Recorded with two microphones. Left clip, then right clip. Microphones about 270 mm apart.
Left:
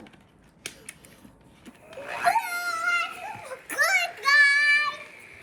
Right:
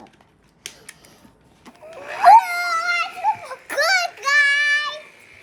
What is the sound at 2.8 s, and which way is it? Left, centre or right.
Children playing, right.